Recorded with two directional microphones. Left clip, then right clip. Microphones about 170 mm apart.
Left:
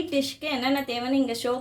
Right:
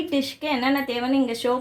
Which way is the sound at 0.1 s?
45° right (ahead or behind).